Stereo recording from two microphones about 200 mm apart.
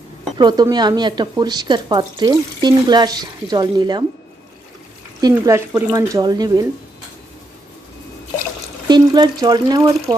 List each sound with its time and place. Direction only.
0.3 s speech: 20° right (ahead or behind)
5.2 s speech: 15° right (ahead or behind)
8.9 s speech: 20° right (ahead or behind)